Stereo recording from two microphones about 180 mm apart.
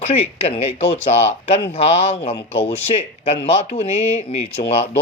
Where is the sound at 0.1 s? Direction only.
35° left (ahead or behind).